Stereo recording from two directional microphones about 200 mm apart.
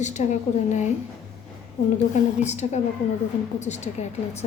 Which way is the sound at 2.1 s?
35° left (ahead or behind).